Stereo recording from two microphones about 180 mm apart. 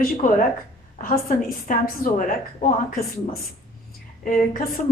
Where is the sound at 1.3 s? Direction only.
50° left (ahead or behind).